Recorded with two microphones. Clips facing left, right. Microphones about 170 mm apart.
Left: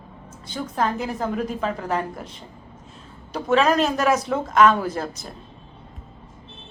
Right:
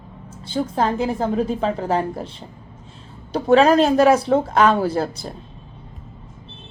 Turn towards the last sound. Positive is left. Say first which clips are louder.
# right 6 dB
turn(degrees=-30)  # may be behind; listen again after turning